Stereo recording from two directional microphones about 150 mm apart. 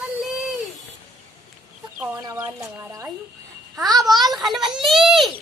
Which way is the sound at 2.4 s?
20° right (ahead or behind).